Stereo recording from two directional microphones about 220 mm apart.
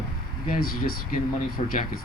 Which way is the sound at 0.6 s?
40° left (ahead or behind).